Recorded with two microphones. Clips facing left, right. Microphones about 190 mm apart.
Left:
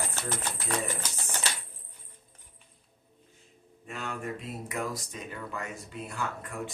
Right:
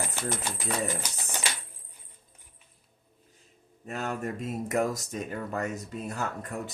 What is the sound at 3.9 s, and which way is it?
Speech, 40° right (ahead or behind).